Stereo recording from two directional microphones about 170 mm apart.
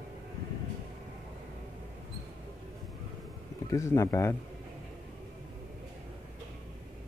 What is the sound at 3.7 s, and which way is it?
Speech, 20° left (ahead or behind).